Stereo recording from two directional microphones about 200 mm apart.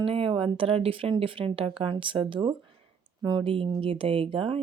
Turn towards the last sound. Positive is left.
turn(degrees=-25)  # may be behind; listen again after turning